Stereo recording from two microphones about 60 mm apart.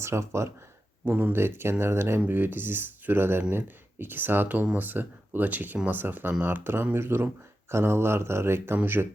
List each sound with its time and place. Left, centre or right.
0.0 s speech: right
1.0 s speech: right
1.4 s speech: right